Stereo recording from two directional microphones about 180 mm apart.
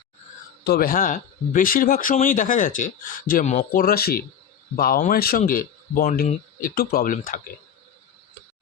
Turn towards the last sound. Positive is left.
turn(degrees=50)  # may be behind; listen again after turning